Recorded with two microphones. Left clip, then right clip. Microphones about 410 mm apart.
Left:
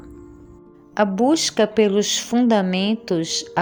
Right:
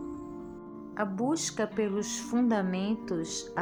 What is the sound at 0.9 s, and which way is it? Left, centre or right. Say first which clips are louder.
A woman's voice: left 13 dB; left.